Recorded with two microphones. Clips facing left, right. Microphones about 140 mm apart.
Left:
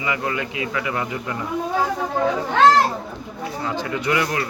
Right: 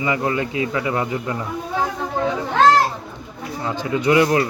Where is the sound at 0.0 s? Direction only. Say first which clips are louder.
Right 4 dB; 30° right (ahead or behind).